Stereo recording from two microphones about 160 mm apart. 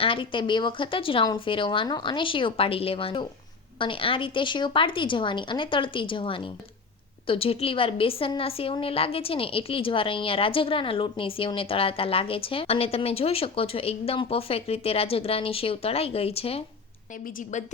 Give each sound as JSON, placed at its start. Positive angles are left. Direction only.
{"t": 0.0, "sound": "a woman's voice", "side_deg": 35}